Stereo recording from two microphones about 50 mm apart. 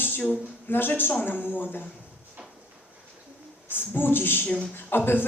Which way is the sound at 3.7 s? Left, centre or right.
Left.